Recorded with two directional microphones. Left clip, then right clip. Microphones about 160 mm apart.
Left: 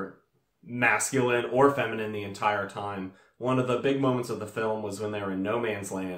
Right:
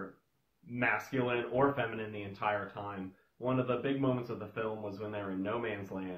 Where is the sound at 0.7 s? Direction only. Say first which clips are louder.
Left 8 dB; centre (ahead or behind).